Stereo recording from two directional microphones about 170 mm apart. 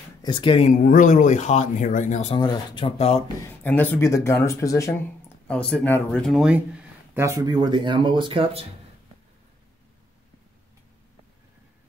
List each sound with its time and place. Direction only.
0.2 s speech: 30° left (ahead or behind)
0.7 s speech: 50° left (ahead or behind)
2.3 s speech: 30° left (ahead or behind)
3.4 s speech: 10° left (ahead or behind)
5.5 s speech: 5° left (ahead or behind); by 8.6 s 30° right (ahead or behind)